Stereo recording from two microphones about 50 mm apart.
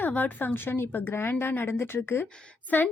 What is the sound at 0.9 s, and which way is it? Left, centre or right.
Speech, left.